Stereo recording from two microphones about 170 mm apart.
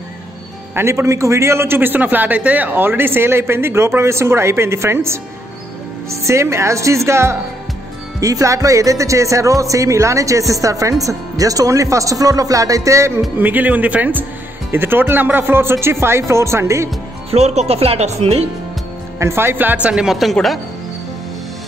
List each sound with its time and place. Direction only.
0.7 s a man's voice: 15° right (ahead or behind)
17.3 s speech: 35° right (ahead or behind)
19.1 s a man's voice: 15° right (ahead or behind); by 20.5 s centre (ahead or behind)